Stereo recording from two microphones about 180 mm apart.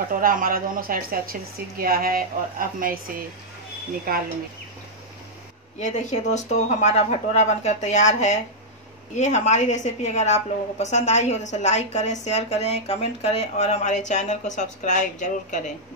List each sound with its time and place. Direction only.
0.1 s a woman's voice: 50° right (ahead or behind)
5.8 s a woman's voice: 40° left (ahead or behind)